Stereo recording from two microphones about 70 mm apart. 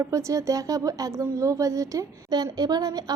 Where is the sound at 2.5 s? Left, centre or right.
Right.